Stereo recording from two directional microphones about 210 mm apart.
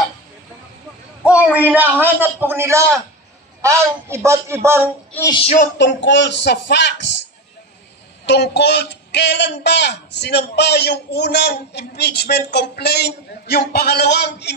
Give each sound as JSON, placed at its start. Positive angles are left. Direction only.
{"t": 1.2, "sound": "a man's voice", "side_deg": -5}
{"t": 5.3, "sound": "speech", "side_deg": 30}
{"t": 5.8, "sound": "speech", "side_deg": 60}
{"t": 8.3, "sound": "speech", "side_deg": 55}